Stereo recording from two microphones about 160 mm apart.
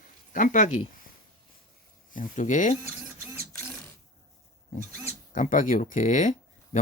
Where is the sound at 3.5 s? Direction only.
15° left (ahead or behind).